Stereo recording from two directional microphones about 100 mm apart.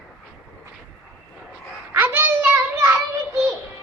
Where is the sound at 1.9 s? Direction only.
20° right (ahead or behind).